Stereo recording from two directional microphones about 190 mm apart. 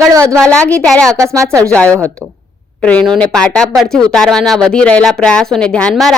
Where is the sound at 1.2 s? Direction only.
15° right (ahead or behind).